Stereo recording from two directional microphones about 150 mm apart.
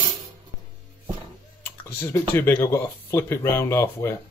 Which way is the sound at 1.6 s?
15° left (ahead or behind).